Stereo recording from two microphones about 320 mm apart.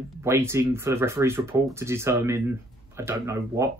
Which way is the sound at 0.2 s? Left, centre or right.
Centre.